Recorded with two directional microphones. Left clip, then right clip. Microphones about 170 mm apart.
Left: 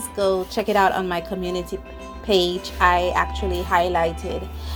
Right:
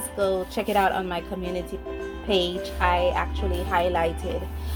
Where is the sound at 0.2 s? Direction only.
25° left (ahead or behind).